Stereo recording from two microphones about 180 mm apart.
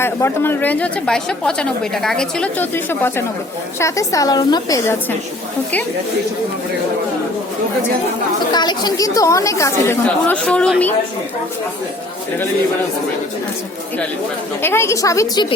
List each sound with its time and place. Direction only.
0.0 s a woman's voice: 15° left (ahead or behind)
8.5 s a woman's voice: 25° left (ahead or behind); by 10.9 s 5° left (ahead or behind)
14.6 s a woman's voice: 15° left (ahead or behind)